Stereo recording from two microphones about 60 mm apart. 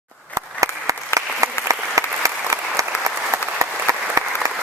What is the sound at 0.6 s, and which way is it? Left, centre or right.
Applause, right.